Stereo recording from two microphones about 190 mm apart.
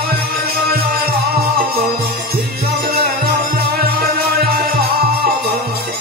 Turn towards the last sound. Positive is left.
turn(degrees=-55)  # may be behind; listen again after turning